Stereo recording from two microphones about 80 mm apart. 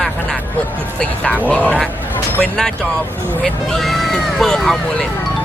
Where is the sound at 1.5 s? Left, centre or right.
Centre.